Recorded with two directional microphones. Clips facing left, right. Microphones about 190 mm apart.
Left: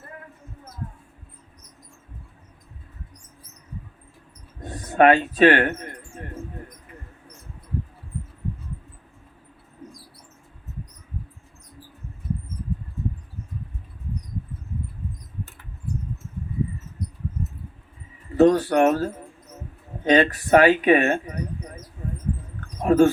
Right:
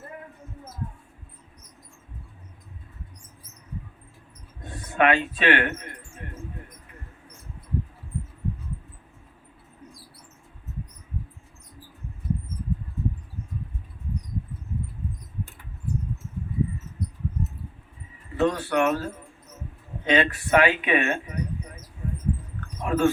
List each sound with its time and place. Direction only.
4.6 s speech: 40° left (ahead or behind)
18.3 s speech: 40° left (ahead or behind)
22.8 s speech: 40° left (ahead or behind)